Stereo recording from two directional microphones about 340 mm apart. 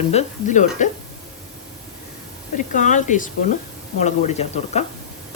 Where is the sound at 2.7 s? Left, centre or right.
Left.